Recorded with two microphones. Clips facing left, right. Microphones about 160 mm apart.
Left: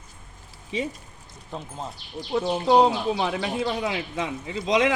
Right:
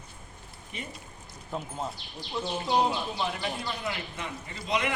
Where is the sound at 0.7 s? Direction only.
90° left.